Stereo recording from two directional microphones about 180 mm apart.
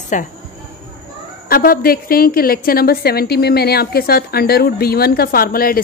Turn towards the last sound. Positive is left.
turn(degrees=55)  # may be behind; listen again after turning